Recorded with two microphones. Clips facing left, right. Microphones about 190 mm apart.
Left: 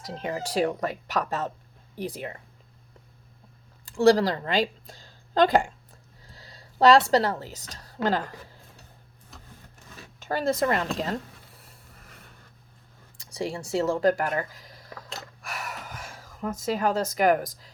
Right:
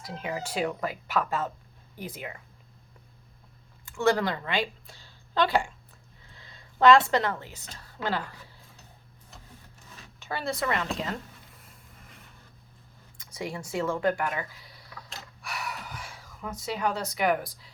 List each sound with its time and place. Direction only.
0.0 s speech: 35° left (ahead or behind)
3.8 s a woman's voice: 35° left (ahead or behind)
6.2 s a sound: 40° left (ahead or behind)
7.7 s speech: 40° left (ahead or behind)
10.2 s speech: 45° left (ahead or behind)
13.3 s a sound: 30° left (ahead or behind)